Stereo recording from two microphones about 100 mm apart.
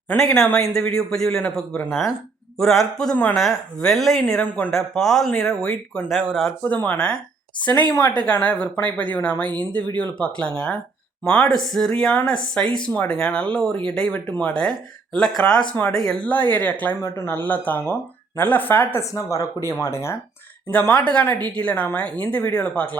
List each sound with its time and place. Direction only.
0.7 s speech: 5° left (ahead or behind)
6.1 s speech: centre (ahead or behind)
6.6 s speech: 15° left (ahead or behind)
16.2 s speech: 20° left (ahead or behind)
19.1 s speech: 30° left (ahead or behind)
20.7 s speech: 15° left (ahead or behind)